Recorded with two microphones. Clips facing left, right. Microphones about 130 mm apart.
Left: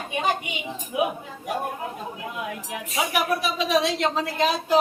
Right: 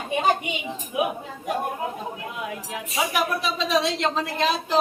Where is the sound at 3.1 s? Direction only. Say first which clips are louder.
Left 3 dB; 10° left (ahead or behind).